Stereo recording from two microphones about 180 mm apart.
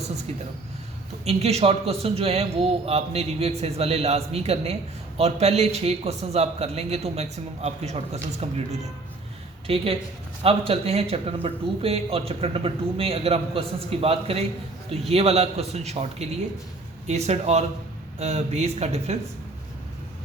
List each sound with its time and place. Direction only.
0.3 s a man's voice: 35° right (ahead or behind)